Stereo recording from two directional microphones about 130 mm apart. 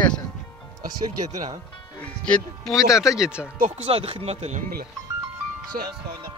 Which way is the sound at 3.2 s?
10° right (ahead or behind).